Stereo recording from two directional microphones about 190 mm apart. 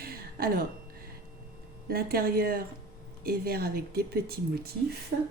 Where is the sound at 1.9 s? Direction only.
50° right (ahead or behind).